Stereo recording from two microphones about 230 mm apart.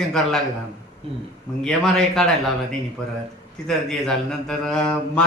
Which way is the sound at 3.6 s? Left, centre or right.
Centre.